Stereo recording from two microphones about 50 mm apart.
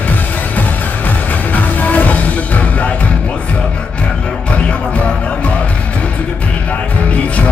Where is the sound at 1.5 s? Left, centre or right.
Left.